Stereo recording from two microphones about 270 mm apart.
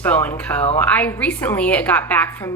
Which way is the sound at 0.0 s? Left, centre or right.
Centre.